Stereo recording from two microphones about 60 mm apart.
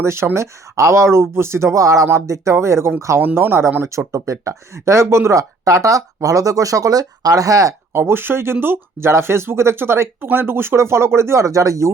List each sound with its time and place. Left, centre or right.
0.0 s speech: right
2.0 s speech: right
3.2 s speech: right
3.8 s speech: right
5.3 s speech: right
7.9 s speech: right